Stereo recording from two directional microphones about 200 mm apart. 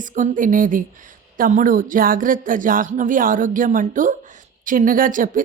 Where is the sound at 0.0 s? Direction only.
40° right (ahead or behind).